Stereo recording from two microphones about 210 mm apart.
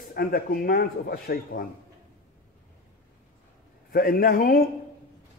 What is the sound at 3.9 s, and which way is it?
Speech, 45° left (ahead or behind).